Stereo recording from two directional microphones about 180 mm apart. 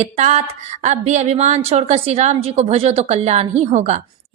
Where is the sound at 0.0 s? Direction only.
40° right (ahead or behind).